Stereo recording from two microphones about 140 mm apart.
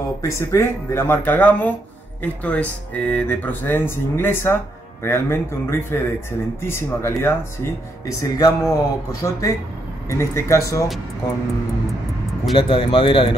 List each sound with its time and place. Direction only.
0.2 s speech: 20° left (ahead or behind)
12.5 s speech: 40° left (ahead or behind)